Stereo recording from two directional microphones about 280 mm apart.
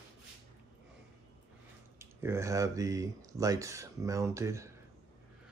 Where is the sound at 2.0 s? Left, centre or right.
Centre.